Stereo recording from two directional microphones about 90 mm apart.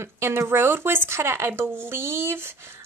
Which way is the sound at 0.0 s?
30° right (ahead or behind).